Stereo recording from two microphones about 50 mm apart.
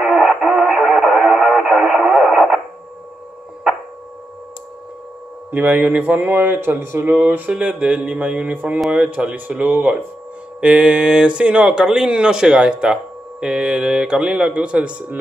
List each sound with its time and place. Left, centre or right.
0.0 s radio: centre
5.5 s a man's voice: right
7.1 s speech: right
7.5 s speech: right
10.6 s speech: right